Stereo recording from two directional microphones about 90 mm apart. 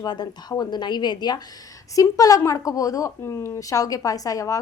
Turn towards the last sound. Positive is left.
turn(degrees=40)  # may be behind; listen again after turning